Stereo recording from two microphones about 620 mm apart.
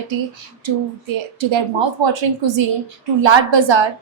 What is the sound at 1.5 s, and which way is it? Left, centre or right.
A woman's voice, right.